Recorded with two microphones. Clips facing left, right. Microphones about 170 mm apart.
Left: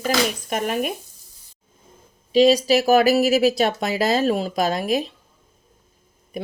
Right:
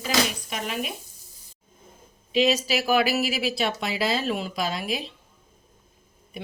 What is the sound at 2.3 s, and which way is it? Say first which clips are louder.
Speech: left 7 dB; 35° left (ahead or behind).